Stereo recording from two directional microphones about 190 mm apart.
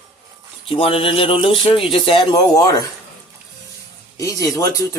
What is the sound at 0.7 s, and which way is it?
Speech, 30° left (ahead or behind).